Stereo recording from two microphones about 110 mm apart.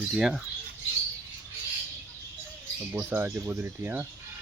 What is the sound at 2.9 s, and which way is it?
Speech, 15° right (ahead or behind).